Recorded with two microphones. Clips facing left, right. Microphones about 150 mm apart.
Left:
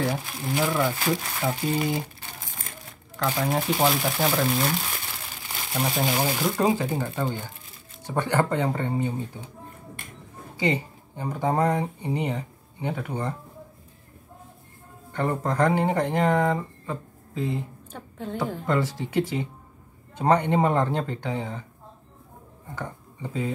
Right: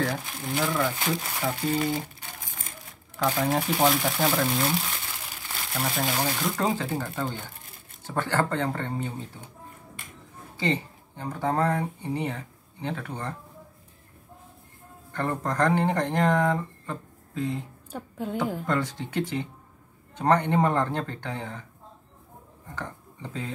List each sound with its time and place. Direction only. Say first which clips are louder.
0.0 s speech: left 2 dB; 15° left (ahead or behind)
3.3 s speech: left 1 dB; 5° left (ahead or behind)
5.5 s crumpling: left 3 dB; 15° left (ahead or behind)
6.1 s speech: left 3 dB; 10° left (ahead or behind)
10.6 s speech: left 2 dB; 10° left (ahead or behind)
15.1 s speech: left 2 dB; 10° left (ahead or behind)
18.7 s speech: left 2 dB; 5° left (ahead or behind)
22.8 s speech: left 2 dB; 10° left (ahead or behind)